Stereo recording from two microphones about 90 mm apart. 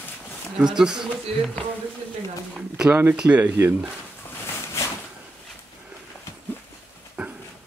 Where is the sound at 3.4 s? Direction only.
25° right (ahead or behind).